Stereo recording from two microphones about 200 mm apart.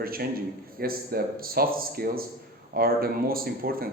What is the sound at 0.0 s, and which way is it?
A man's voice, 45° right (ahead or behind).